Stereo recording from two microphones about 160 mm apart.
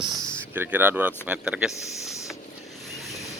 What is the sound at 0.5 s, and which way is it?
Speech, 10° right (ahead or behind).